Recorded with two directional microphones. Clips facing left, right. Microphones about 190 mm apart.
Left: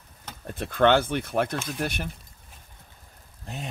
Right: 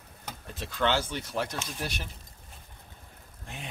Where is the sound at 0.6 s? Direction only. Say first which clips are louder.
Left 8 dB; 55° left (ahead or behind).